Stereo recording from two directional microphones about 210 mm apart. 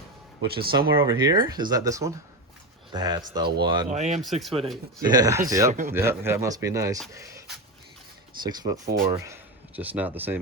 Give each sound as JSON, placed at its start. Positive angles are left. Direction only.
{"t": 0.4, "sound": "speech", "side_deg": -45}
{"t": 0.9, "sound": "speech", "side_deg": -20}
{"t": 3.8, "sound": "speech", "side_deg": -35}
{"t": 4.3, "sound": "speech", "side_deg": 0}
{"t": 5.0, "sound": "speech", "side_deg": -20}
{"t": 8.4, "sound": "speech", "side_deg": -15}